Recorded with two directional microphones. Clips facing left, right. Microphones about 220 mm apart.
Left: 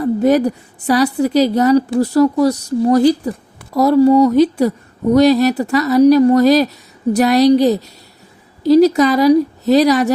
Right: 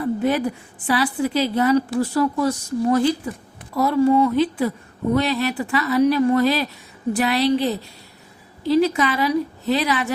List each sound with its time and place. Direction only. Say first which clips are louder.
0.0 s speech: left 7 dB; 40° left (ahead or behind)